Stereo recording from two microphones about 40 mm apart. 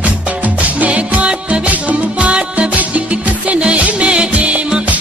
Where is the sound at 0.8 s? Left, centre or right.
Right.